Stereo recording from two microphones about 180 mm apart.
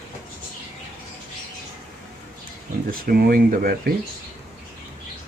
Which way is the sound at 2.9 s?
55° right (ahead or behind).